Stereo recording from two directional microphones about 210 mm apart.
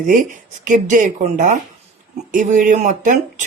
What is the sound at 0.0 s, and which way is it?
Speech, 40° right (ahead or behind).